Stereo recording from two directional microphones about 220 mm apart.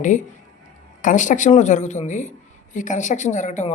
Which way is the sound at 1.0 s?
35° left (ahead or behind).